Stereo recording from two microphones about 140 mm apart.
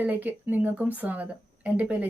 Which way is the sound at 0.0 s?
10° right (ahead or behind).